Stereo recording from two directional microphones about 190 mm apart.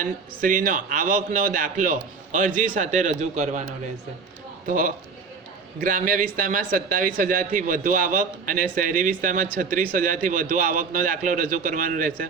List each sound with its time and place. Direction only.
0.0 s a man's voice: 45° right (ahead or behind)
4.6 s a man's voice: 45° right (ahead or behind)